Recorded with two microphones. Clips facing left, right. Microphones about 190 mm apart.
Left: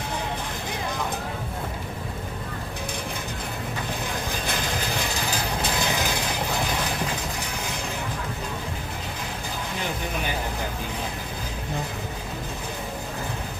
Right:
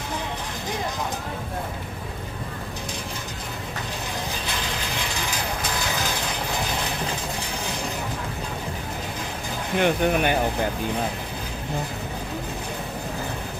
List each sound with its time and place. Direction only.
9.7 s speech: 65° right (ahead or behind)